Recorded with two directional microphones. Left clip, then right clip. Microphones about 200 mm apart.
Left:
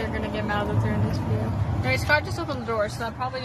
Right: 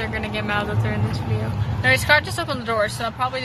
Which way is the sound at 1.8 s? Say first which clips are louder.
Right 6 dB; centre (ahead or behind).